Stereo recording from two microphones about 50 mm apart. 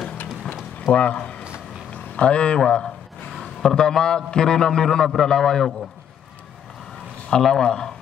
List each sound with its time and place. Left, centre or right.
0.7 s a sound: left
1.9 s speech: left; by 5.8 s centre
7.2 s speech: centre